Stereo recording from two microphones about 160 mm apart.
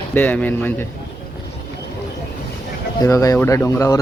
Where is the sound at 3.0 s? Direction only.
20° left (ahead or behind).